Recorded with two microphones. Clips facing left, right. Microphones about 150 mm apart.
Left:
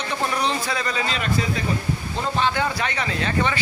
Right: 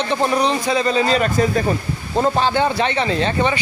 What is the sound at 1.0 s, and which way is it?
Speech, 45° right (ahead or behind).